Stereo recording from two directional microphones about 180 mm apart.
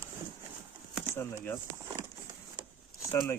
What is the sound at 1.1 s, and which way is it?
Speech, 15° left (ahead or behind).